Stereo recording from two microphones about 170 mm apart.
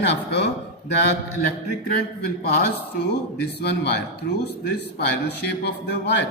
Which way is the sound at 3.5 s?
80° left.